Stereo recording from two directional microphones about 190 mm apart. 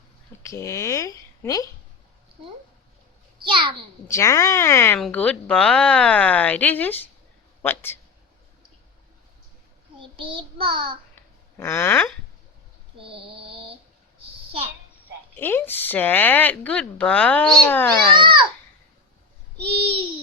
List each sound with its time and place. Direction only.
0.4 s speech: 15° left (ahead or behind)
3.4 s child singing: 25° right (ahead or behind)
4.1 s speech: 15° left (ahead or behind)
10.0 s child singing: 30° right (ahead or behind)
11.1 s a sound: 15° left (ahead or behind)
13.3 s a sound: 30° right (ahead or behind)
15.4 s speech: 10° left (ahead or behind)
19.7 s child singing: 30° right (ahead or behind)